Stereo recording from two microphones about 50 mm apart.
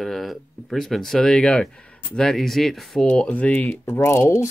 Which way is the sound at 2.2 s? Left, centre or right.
Centre.